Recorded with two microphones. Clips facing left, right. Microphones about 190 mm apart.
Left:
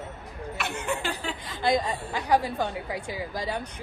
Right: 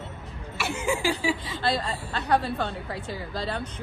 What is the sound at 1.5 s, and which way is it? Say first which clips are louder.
A woman's voice: left 2 dB; 15° left (ahead or behind).